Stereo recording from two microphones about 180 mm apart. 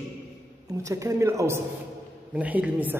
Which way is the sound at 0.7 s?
15° right (ahead or behind).